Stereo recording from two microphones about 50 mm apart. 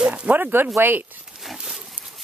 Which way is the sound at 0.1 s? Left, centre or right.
Right.